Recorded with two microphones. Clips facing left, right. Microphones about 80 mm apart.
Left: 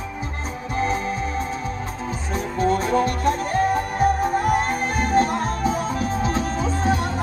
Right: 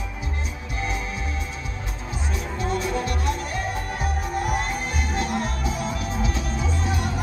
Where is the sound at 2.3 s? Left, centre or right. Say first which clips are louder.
Left 7 dB; left.